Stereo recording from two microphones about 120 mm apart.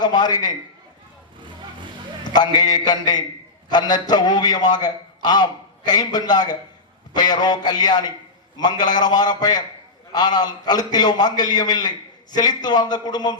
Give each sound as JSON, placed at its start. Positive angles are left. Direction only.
{"t": 0.0, "sound": "a man's voice", "side_deg": 35}
{"t": 2.3, "sound": "a man's voice", "side_deg": 35}